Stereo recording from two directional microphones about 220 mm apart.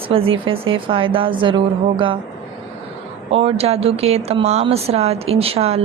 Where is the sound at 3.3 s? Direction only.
25° right (ahead or behind).